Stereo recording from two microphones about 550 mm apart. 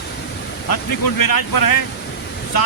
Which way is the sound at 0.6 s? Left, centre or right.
Left.